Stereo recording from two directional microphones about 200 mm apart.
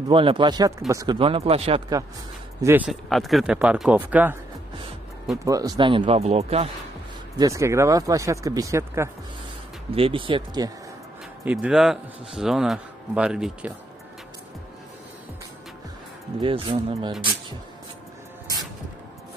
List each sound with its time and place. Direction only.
0.1 s speech: 25° right (ahead or behind)
2.6 s a man's voice: 10° right (ahead or behind)
5.4 s speech: 15° right (ahead or behind)
7.3 s speech: 15° right (ahead or behind)
9.8 s speech: 25° right (ahead or behind)
11.4 s a man's voice: 5° right (ahead or behind)
16.3 s speech: 25° right (ahead or behind)